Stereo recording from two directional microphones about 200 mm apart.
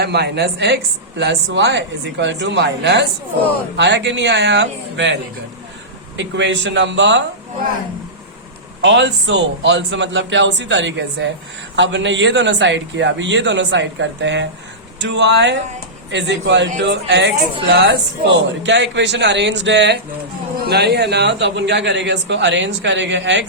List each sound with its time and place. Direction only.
0.0 s speech: 55° right (ahead or behind)
6.1 s speech: 65° right (ahead or behind)
8.8 s speech: 60° right (ahead or behind)